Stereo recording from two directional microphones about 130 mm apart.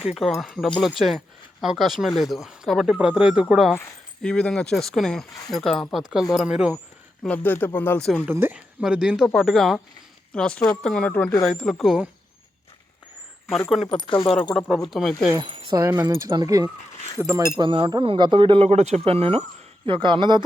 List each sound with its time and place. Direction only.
0.1 s speech: centre (ahead or behind)
7.2 s speech: 15° left (ahead or behind)
8.3 s a woman's voice: 15° right (ahead or behind)
13.8 s speech: 40° left (ahead or behind)
14.8 s speech: centre (ahead or behind)
15.4 s speech: 40° right (ahead or behind)
15.7 s speech: 20° right (ahead or behind)
17.2 s a woman's voice: 15° right (ahead or behind)
17.6 s speech: 40° right (ahead or behind)
18.7 s speech: 60° right (ahead or behind); by 20.4 s 35° right (ahead or behind)